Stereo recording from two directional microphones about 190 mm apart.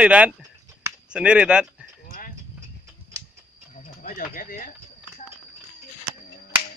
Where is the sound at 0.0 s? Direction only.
5° right (ahead or behind).